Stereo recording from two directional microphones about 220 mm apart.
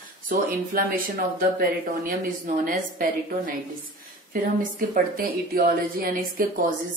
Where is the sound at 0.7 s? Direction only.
40° right (ahead or behind).